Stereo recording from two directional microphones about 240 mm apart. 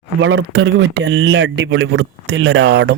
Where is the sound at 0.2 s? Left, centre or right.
Right.